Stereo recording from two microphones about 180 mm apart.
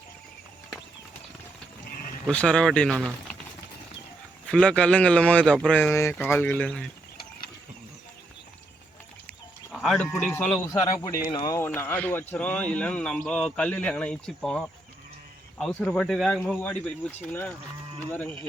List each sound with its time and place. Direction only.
2.2 s speech: 5° left (ahead or behind)
4.4 s speech: 5° left (ahead or behind)
9.7 s speech: centre (ahead or behind)
10.7 s speech: 20° left (ahead or behind)